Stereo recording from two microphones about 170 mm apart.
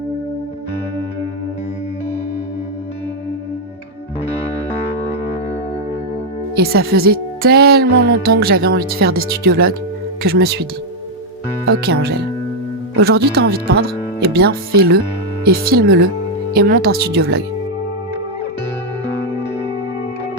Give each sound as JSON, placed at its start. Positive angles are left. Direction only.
{"t": 6.6, "sound": "speech", "side_deg": -65}
{"t": 11.8, "sound": "speech", "side_deg": -75}